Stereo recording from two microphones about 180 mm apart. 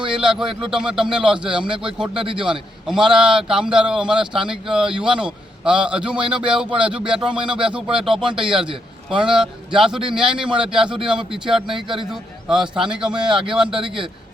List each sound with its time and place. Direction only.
0.1 s a man's voice: 5° right (ahead or behind)